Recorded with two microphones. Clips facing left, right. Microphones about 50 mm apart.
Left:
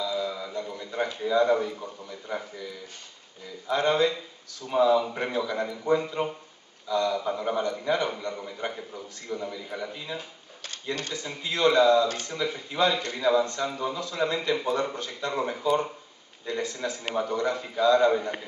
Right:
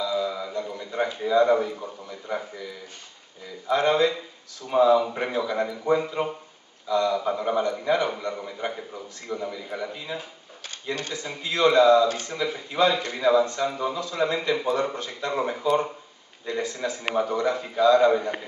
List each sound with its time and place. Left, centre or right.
0.0 s a sound: centre
1.1 s a man's voice: centre
16.7 s a man's voice: centre